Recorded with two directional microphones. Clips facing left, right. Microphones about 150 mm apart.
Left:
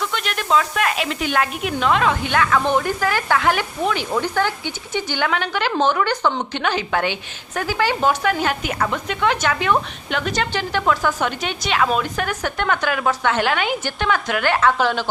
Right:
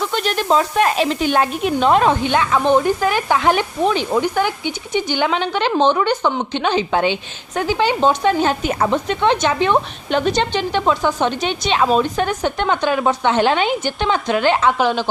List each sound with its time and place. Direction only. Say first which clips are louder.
0.0 s speech: right 5 dB; 35° right (ahead or behind)
2.3 s speech: right 3 dB; 20° right (ahead or behind)